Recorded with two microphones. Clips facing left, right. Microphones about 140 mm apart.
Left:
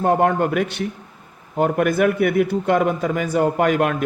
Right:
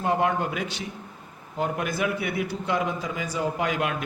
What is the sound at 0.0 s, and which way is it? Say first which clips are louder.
A man's voice: left 7 dB; 50° left (ahead or behind).